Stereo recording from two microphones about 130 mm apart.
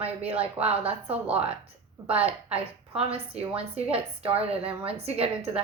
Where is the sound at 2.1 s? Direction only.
50° right (ahead or behind).